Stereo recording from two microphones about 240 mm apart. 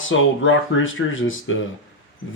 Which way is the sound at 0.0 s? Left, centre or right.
Left.